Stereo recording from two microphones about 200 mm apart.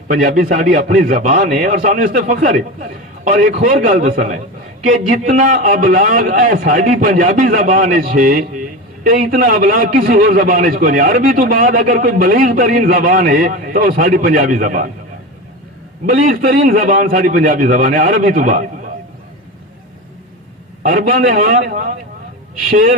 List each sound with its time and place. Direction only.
0.1 s a man's voice: 45° right (ahead or behind)
16.0 s a man's voice: 45° right (ahead or behind)
20.8 s a man's voice: 40° right (ahead or behind)